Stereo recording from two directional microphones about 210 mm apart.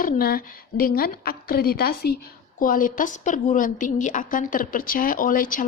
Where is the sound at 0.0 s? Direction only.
45° left (ahead or behind).